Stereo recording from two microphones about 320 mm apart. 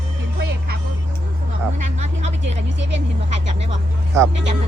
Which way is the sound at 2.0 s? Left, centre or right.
Centre.